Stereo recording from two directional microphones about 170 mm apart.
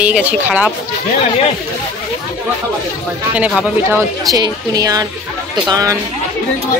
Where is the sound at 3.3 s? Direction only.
10° right (ahead or behind).